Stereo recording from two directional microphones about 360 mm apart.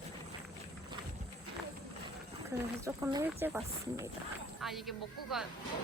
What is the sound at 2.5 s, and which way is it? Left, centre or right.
A woman's voice, centre.